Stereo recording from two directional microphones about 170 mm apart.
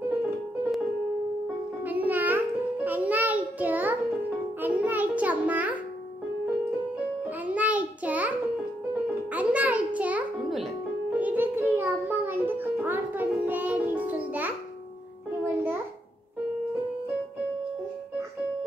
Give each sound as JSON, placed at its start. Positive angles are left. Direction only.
{"t": 1.9, "sound": "music", "side_deg": -10}
{"t": 7.2, "sound": "music", "side_deg": -10}